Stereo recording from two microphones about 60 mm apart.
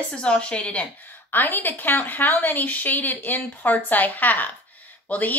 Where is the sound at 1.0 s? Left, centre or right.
Left.